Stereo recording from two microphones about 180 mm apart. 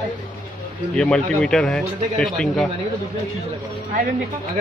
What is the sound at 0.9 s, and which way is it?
A man's voice, 5° left (ahead or behind).